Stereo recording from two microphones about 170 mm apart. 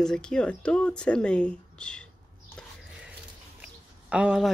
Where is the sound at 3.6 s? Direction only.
5° right (ahead or behind).